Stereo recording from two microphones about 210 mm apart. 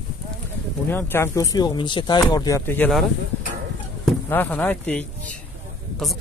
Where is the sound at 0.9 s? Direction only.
10° left (ahead or behind).